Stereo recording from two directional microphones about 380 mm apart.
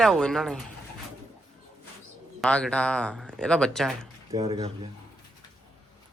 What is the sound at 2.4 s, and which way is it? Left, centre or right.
Speech, centre.